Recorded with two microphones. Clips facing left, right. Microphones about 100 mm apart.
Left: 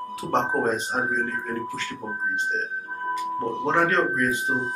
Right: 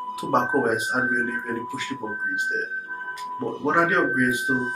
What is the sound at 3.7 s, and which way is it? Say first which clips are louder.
Speech: right 2 dB; 10° right (ahead or behind).